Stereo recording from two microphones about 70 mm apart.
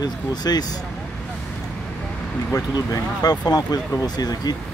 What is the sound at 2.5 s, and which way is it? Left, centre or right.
Speech, left.